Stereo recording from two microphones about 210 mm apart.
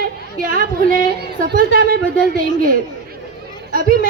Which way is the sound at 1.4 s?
45° right (ahead or behind).